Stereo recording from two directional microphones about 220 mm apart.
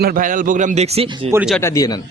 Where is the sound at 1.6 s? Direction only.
15° left (ahead or behind).